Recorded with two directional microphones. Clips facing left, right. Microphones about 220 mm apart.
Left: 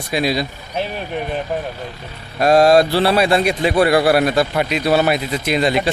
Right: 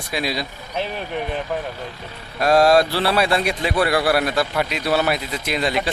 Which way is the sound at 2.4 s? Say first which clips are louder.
Left 3 dB; 20° left (ahead or behind).